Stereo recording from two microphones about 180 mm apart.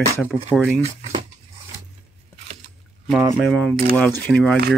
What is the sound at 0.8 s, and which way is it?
Speech, 35° right (ahead or behind).